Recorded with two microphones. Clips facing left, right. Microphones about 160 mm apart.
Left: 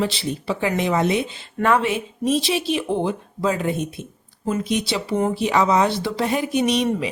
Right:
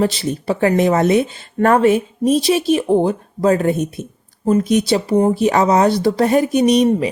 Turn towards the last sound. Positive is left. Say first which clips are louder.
# right 7 dB
turn(degrees=-40)  # may be behind; listen again after turning